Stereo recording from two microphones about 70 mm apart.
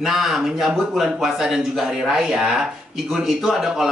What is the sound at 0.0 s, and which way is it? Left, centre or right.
Speech, centre.